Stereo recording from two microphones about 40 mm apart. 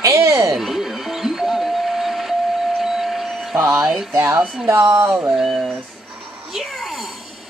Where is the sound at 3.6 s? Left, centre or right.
Right.